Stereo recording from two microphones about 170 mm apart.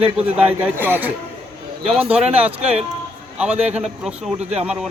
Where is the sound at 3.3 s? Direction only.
10° right (ahead or behind).